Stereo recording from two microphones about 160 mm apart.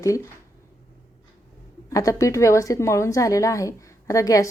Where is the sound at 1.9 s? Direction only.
20° left (ahead or behind).